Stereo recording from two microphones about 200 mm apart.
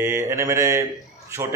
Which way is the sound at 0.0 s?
15° right (ahead or behind).